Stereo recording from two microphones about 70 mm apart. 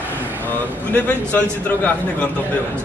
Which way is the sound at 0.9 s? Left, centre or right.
Centre.